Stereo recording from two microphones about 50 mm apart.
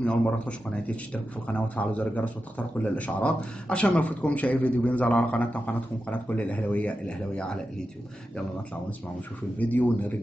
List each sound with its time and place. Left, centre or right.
0.0 s a man's voice: left
9.6 s speech: left